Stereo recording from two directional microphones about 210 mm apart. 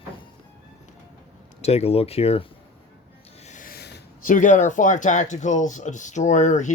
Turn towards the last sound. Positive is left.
turn(degrees=35)  # may be behind; listen again after turning